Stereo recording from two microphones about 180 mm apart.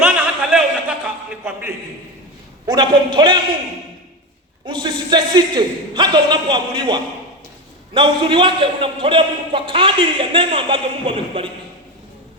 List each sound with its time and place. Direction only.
0.5 s a sound: 5° right (ahead or behind)
2.6 s a man's voice: 25° right (ahead or behind)
4.6 s a man's voice: 25° right (ahead or behind)